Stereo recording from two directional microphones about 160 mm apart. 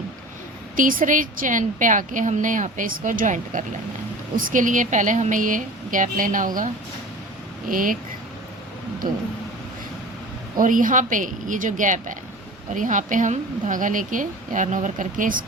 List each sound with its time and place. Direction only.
0.8 s a woman's voice: 55° right (ahead or behind)
7.7 s a woman's voice: 60° right (ahead or behind)
10.6 s a woman's voice: 55° right (ahead or behind)